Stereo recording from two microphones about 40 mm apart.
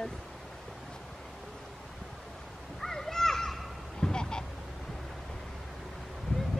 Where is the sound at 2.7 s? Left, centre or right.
Centre.